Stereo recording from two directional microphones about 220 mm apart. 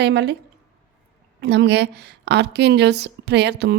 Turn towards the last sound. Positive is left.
turn(degrees=-50)  # may be behind; listen again after turning